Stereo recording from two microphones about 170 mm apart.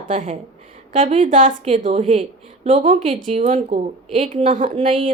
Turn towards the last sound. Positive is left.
turn(degrees=-30)  # may be behind; listen again after turning